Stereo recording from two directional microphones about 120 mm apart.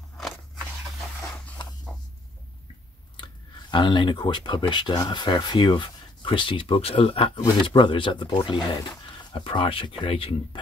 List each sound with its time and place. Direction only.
3.7 s speech: 40° left (ahead or behind)